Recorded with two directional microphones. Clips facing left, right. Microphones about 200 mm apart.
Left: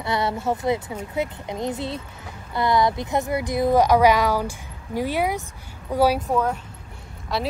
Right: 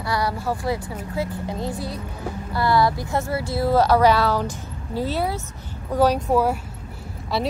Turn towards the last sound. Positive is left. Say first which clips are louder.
# right 2 dB
turn(degrees=0)  # may be behind; listen again after turning